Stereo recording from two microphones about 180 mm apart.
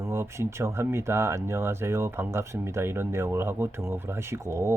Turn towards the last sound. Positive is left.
turn(degrees=-15)  # may be behind; listen again after turning